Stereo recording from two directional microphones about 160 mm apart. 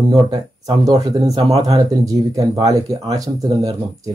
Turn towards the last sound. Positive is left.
turn(degrees=-20)  # may be behind; listen again after turning